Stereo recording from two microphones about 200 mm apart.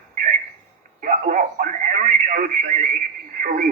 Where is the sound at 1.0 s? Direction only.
45° right (ahead or behind).